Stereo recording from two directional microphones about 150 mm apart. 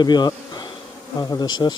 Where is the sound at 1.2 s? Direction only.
25° left (ahead or behind).